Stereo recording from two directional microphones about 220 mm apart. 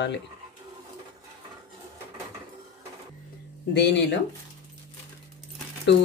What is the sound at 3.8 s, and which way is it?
Speech, 50° left (ahead or behind).